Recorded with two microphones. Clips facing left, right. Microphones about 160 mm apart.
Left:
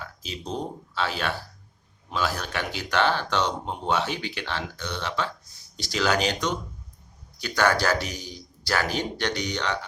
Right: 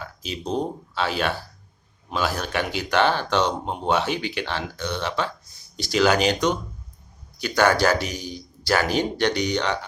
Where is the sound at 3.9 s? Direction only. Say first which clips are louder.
Right 3 dB; 65° right (ahead or behind).